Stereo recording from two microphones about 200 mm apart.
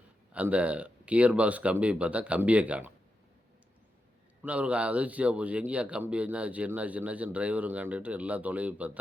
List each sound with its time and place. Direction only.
0.3 s speech: 5° right (ahead or behind)
4.4 s speech: 5° right (ahead or behind)